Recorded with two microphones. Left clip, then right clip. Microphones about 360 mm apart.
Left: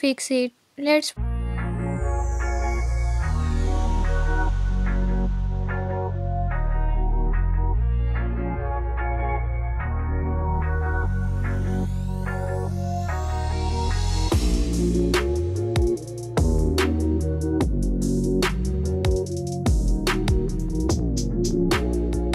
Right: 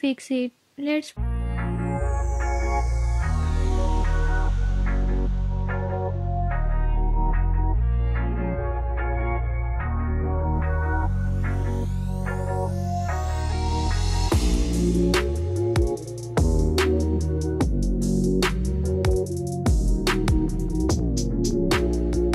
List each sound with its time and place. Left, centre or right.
0.0 s speech: centre
1.6 s music: centre
15.0 s music: centre